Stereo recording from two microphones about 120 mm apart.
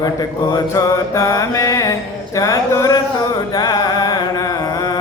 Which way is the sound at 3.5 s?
35° left (ahead or behind).